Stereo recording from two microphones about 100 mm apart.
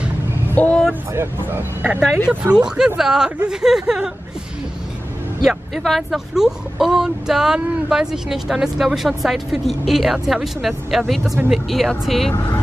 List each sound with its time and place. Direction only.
0.6 s vehicle: 10° left (ahead or behind)
1.1 s speech: 25° right (ahead or behind)
1.8 s speech: 15° right (ahead or behind)
5.4 s speech: centre (ahead or behind)
12.3 s speech: 20° left (ahead or behind)